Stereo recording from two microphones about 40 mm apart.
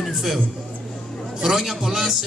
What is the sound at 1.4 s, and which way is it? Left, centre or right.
Speech, centre.